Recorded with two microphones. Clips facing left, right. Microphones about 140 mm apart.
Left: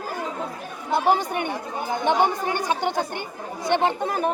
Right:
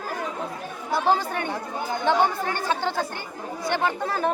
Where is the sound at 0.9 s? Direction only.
20° left (ahead or behind).